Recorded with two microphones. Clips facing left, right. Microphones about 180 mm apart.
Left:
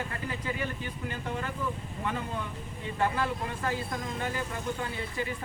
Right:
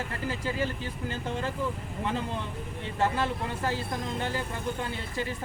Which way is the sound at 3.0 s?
30° right (ahead or behind).